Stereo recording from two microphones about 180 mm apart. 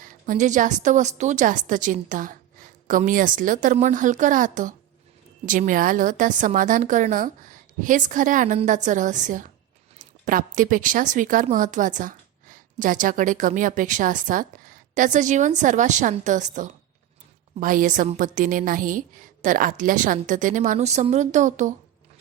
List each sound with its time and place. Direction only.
0.1 s a woman's voice: 45° right (ahead or behind)